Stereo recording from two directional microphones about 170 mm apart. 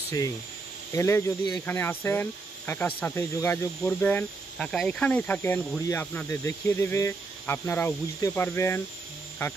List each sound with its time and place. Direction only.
0.9 s speech: 15° left (ahead or behind)